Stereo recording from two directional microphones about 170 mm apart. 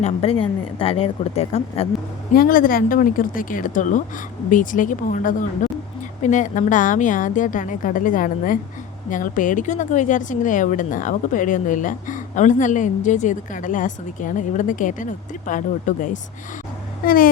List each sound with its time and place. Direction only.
0.0 s speech: 35° left (ahead or behind)
2.3 s speech: 55° left (ahead or behind)